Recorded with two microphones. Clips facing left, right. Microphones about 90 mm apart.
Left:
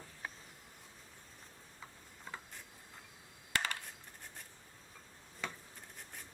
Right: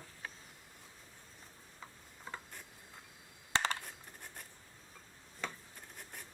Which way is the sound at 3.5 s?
25° right (ahead or behind).